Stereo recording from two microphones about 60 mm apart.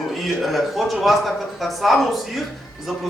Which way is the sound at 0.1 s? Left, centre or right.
Centre.